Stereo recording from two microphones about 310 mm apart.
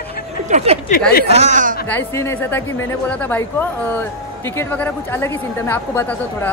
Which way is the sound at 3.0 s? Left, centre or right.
Centre.